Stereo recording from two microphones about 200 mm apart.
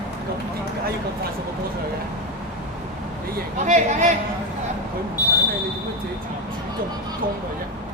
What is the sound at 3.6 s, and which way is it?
Speech, 35° right (ahead or behind).